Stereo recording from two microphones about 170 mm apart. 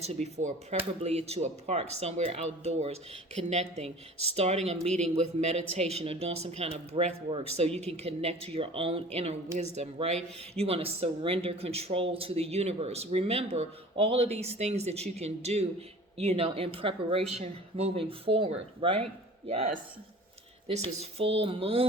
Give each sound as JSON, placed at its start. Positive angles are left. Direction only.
{"t": 0.0, "sound": "speech", "side_deg": -40}